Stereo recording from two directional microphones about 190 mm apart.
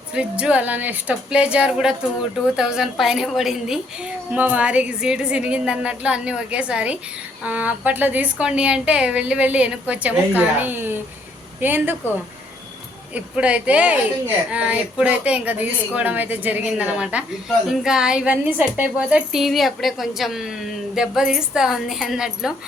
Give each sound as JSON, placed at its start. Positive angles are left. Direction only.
{"t": 0.1, "sound": "a woman's voice", "side_deg": -5}
{"t": 13.1, "sound": "a woman's voice", "side_deg": -5}